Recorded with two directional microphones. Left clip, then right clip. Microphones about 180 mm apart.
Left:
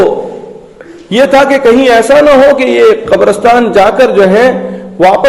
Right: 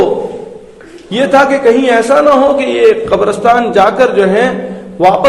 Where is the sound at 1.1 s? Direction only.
40° left (ahead or behind).